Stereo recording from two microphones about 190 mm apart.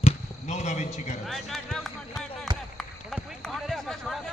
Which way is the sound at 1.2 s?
Centre (ahead or behind).